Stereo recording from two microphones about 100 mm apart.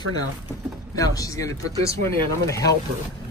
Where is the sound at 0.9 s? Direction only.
35° left (ahead or behind).